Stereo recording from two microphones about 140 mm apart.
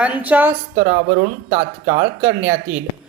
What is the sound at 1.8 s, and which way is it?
Speech, 15° right (ahead or behind).